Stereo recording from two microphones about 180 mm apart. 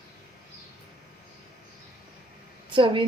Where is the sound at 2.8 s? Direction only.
30° right (ahead or behind).